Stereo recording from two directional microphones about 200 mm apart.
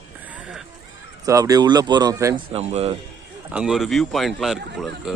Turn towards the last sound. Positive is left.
turn(degrees=0)  # may be behind; listen again after turning